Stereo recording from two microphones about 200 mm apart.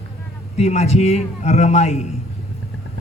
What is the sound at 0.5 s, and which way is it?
Speech, 35° left (ahead or behind).